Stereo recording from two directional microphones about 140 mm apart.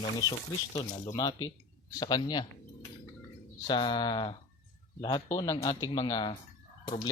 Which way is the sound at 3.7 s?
35° left (ahead or behind).